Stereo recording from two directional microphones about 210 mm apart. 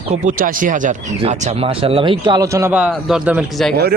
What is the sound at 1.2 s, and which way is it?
A man's voice, 25° right (ahead or behind).